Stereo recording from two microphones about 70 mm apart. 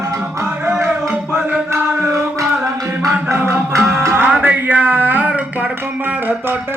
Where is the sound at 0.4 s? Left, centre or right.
Right.